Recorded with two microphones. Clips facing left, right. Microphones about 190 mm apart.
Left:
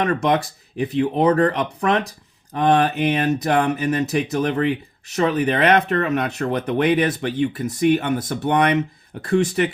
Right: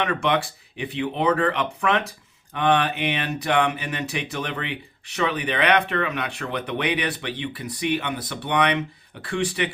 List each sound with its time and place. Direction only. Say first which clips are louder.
0.0 s speech: left 4 dB; 40° left (ahead or behind)